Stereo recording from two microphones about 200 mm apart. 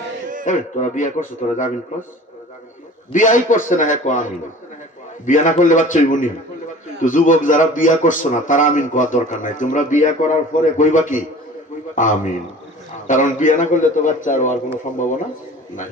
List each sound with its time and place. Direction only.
0.4 s a man's voice: 40° left (ahead or behind)
3.1 s a man's voice: 40° left (ahead or behind)